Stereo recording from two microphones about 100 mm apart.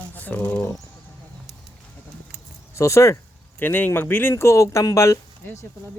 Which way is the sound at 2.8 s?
30° left (ahead or behind).